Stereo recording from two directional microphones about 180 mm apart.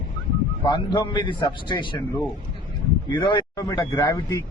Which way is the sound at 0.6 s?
25° left (ahead or behind).